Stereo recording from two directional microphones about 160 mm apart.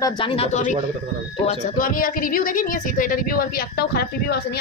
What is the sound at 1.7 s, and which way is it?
A woman's voice, 60° left (ahead or behind).